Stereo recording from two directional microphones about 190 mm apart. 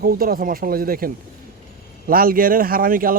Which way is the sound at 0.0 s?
50° right (ahead or behind).